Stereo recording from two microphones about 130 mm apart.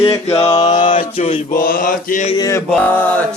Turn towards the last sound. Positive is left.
turn(degrees=10)  # may be behind; listen again after turning